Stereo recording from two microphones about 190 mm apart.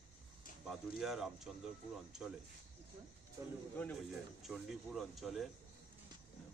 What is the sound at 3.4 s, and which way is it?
Speech, 20° right (ahead or behind).